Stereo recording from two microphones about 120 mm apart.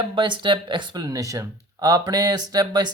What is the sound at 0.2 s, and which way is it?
Speech, 40° right (ahead or behind).